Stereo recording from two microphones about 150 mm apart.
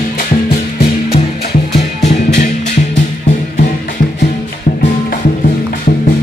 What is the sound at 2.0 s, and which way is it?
Music, 50° left (ahead or behind).